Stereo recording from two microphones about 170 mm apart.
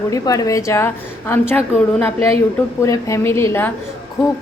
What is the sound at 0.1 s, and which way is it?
A woman's voice, 20° left (ahead or behind).